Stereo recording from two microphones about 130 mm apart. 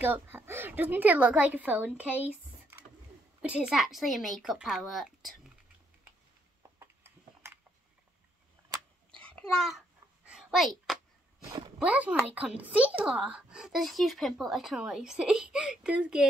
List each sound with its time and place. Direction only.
0.0 s a woman's voice: 15° right (ahead or behind)
3.4 s speech: 5° right (ahead or behind)
6.8 s a sound: 20° right (ahead or behind)
8.6 s a sound: 15° right (ahead or behind)
9.1 s babbling: 5° left (ahead or behind)
11.8 s a woman's voice: 10° right (ahead or behind)